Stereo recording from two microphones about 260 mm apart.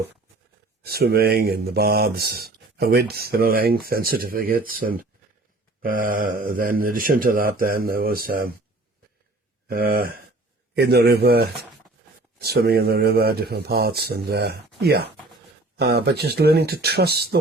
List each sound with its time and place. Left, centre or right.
0.9 s speech: right
9.6 s speech: right